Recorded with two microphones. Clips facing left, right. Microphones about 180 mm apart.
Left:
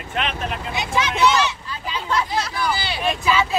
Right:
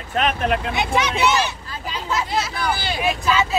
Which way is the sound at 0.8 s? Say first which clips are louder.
Left 4 dB; 65° right (ahead or behind).